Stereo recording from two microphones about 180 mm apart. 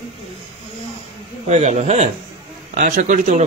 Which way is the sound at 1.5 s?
40° right (ahead or behind).